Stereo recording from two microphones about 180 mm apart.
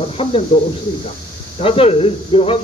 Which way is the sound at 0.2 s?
30° left (ahead or behind).